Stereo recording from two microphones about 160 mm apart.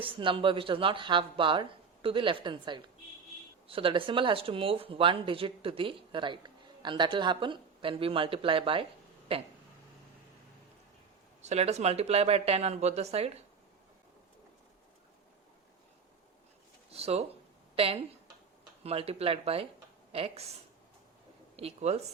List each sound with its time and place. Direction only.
0.0 s speech: 35° right (ahead or behind)
11.4 s speech: 40° right (ahead or behind)
16.9 s speech: 40° right (ahead or behind)
21.5 s speech: 40° right (ahead or behind)